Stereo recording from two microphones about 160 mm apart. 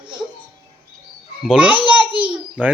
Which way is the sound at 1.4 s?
5° right (ahead or behind).